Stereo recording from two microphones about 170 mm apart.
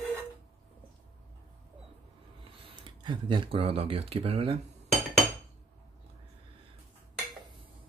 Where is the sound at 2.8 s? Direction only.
30° right (ahead or behind).